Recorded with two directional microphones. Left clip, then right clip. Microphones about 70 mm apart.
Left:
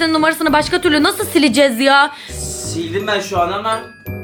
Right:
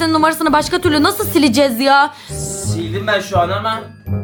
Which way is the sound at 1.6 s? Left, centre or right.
Centre.